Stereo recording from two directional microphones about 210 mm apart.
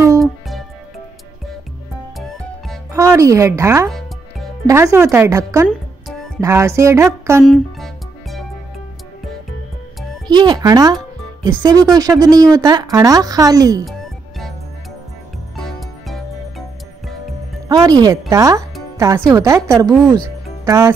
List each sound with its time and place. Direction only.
0.2 s music: centre (ahead or behind)
2.1 s music: centre (ahead or behind)
2.9 s speech: 15° right (ahead or behind)
7.4 s music: centre (ahead or behind)
10.2 s speech: 20° right (ahead or behind)
15.5 s music: centre (ahead or behind)
17.6 s speech: 20° right (ahead or behind)